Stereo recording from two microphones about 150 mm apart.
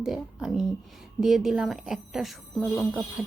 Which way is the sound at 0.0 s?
5° right (ahead or behind).